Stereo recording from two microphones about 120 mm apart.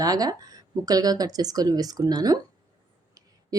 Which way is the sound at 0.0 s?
30° right (ahead or behind).